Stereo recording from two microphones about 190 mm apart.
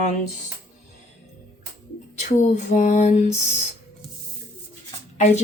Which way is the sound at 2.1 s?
40° left (ahead or behind).